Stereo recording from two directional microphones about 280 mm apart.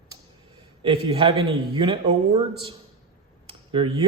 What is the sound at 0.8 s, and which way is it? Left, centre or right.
Speech, centre.